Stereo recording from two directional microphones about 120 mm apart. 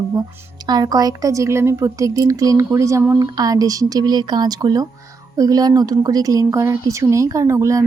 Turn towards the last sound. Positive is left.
turn(degrees=-25)  # may be behind; listen again after turning